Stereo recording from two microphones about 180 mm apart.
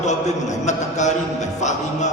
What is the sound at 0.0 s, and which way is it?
A man's voice, 40° left (ahead or behind).